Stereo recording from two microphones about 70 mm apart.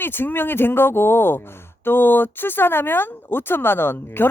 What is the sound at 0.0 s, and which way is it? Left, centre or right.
Speech, left.